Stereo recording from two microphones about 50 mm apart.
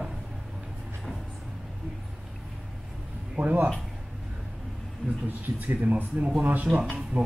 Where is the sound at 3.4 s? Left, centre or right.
Right.